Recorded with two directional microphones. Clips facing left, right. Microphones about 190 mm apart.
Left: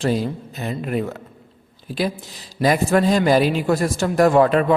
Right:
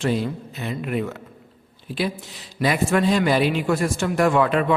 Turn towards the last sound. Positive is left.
turn(degrees=40)  # may be behind; listen again after turning